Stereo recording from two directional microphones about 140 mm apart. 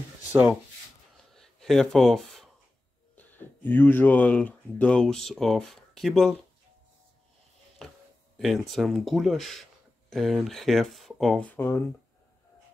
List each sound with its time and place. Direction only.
1.3 s a sound: 5° left (ahead or behind)
3.2 s speech: 15° left (ahead or behind)
8.4 s speech: centre (ahead or behind)
11.5 s speech: 15° left (ahead or behind)